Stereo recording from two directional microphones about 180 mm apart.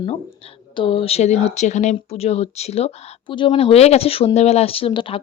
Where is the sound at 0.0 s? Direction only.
30° left (ahead or behind).